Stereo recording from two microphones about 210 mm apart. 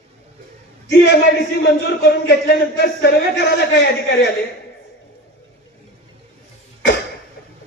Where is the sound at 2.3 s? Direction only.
50° left (ahead or behind).